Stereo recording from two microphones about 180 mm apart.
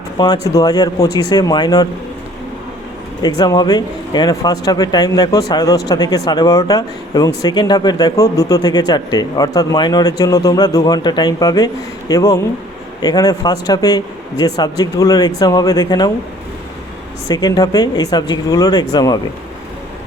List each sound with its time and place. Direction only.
0.4 s speech: 20° left (ahead or behind)
3.2 s speech: 25° left (ahead or behind)
17.2 s speech: 20° left (ahead or behind)